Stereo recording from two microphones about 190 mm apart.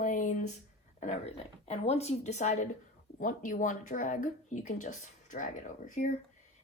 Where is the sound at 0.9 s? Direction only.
40° left (ahead or behind).